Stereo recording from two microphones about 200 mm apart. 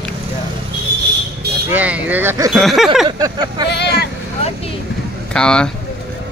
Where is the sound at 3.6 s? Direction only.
55° left (ahead or behind).